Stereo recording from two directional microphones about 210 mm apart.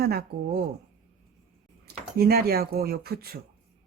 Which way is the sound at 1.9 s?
45° right (ahead or behind).